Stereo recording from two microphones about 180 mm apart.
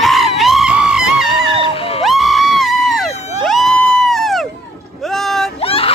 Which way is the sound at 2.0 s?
Centre (ahead or behind).